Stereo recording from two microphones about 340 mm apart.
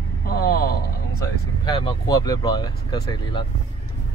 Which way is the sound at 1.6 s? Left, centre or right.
Centre.